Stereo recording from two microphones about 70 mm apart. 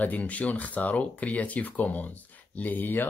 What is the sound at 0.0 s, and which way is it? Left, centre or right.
Speech, left.